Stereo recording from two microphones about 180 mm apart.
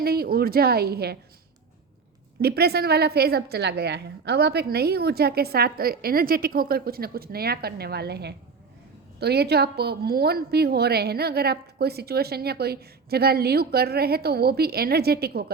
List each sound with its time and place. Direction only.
0.0 s a woman's voice: 60° right (ahead or behind)
2.4 s a woman's voice: 60° right (ahead or behind)